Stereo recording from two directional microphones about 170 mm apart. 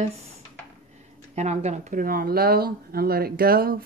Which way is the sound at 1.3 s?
40° right (ahead or behind).